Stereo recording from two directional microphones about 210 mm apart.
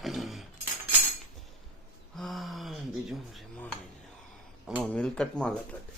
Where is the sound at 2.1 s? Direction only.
Centre (ahead or behind).